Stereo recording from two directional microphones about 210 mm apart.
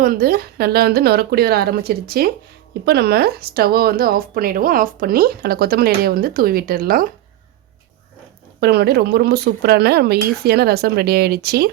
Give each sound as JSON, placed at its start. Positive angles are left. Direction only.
{"t": 0.0, "sound": "speech", "side_deg": -45}
{"t": 8.6, "sound": "speech", "side_deg": -50}